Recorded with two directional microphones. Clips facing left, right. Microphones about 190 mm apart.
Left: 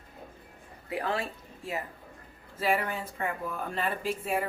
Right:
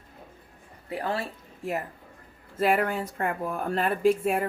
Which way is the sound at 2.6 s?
55° right (ahead or behind).